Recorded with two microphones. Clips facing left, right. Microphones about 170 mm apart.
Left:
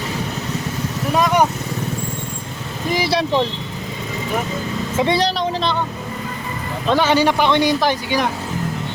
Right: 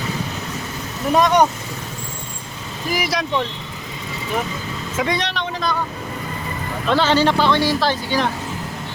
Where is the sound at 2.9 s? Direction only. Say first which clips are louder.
Left 3 dB; 30° left (ahead or behind).